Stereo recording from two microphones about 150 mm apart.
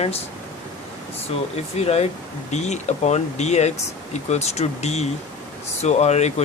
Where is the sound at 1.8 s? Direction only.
45° left (ahead or behind).